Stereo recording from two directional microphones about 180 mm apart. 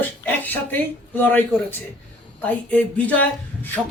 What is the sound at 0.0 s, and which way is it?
Speech, 10° left (ahead or behind).